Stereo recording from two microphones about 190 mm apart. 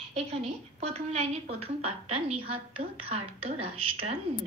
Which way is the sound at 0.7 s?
35° right (ahead or behind).